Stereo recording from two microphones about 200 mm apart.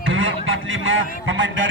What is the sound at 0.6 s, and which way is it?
Speech, 75° right (ahead or behind).